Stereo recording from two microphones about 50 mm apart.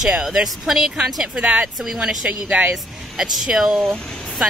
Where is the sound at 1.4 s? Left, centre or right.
Right.